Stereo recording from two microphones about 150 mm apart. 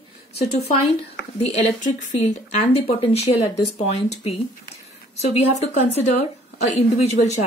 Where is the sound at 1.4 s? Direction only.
45° left (ahead or behind).